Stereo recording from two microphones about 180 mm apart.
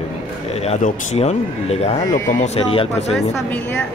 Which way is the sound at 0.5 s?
35° left (ahead or behind).